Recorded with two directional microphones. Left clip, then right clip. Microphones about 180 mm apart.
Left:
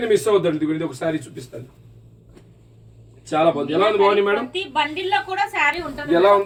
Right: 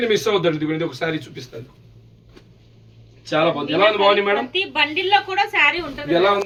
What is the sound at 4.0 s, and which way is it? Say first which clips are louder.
Speech: right 1 dB; 10° right (ahead or behind).